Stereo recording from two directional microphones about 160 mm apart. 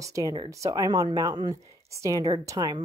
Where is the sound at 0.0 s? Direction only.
20° right (ahead or behind).